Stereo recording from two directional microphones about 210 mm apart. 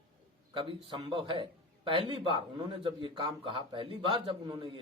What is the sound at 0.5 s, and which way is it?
A man's voice, 25° right (ahead or behind).